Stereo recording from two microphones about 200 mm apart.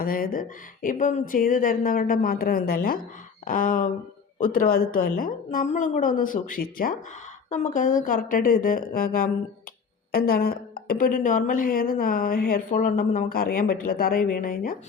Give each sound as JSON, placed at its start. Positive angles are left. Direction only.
{"t": 0.0, "sound": "a woman's voice", "side_deg": 45}